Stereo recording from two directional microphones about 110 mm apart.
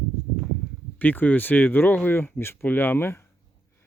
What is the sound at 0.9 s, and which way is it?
Speech, 15° left (ahead or behind).